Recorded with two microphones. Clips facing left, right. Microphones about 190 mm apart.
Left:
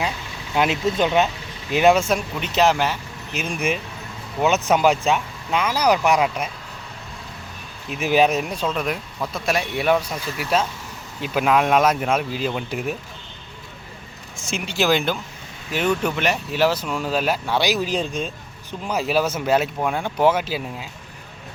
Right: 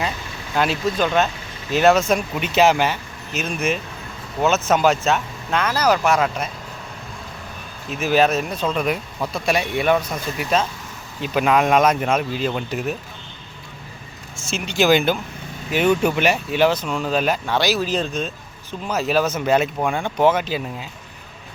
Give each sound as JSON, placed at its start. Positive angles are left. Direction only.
{"t": 0.5, "sound": "speech", "side_deg": 15}
{"t": 2.1, "sound": "speech", "side_deg": -5}
{"t": 3.3, "sound": "speech", "side_deg": 10}
{"t": 7.9, "sound": "speech", "side_deg": 15}
{"t": 8.7, "sound": "speech", "side_deg": 0}
{"t": 14.3, "sound": "speech", "side_deg": 15}
{"t": 14.7, "sound": "speech", "side_deg": 0}